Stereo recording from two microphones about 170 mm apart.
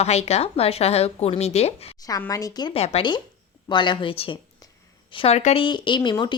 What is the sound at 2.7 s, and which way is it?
Speech, 35° left (ahead or behind).